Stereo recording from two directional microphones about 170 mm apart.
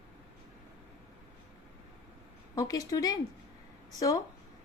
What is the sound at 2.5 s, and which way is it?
Speech, 20° left (ahead or behind).